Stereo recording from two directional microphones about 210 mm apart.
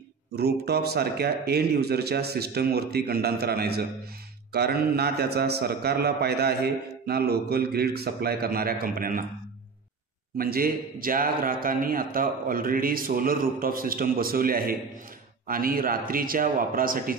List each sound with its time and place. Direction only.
0.4 s a man's voice: 50° right (ahead or behind)
10.3 s a man's voice: 45° right (ahead or behind)